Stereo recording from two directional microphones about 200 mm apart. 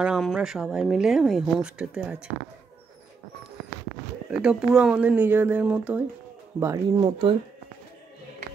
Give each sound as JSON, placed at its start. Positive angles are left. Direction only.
{"t": 0.0, "sound": "speech", "side_deg": 0}
{"t": 4.3, "sound": "speech", "side_deg": -5}
{"t": 6.6, "sound": "speech", "side_deg": -20}